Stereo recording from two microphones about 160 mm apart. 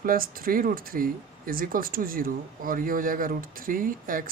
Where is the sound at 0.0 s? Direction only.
65° right (ahead or behind).